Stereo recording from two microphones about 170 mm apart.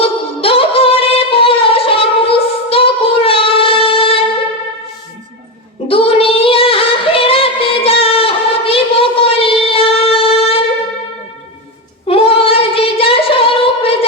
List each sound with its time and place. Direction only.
0.0 s music: 35° left (ahead or behind)
5.9 s female singing: 35° left (ahead or behind)
12.0 s singing: 35° left (ahead or behind)